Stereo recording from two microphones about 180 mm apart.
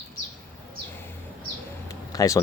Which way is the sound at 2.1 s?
20° left (ahead or behind).